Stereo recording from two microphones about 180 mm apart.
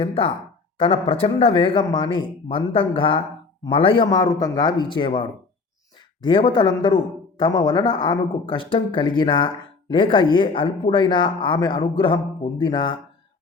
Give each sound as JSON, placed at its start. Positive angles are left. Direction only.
{"t": 0.0, "sound": "speech", "side_deg": 30}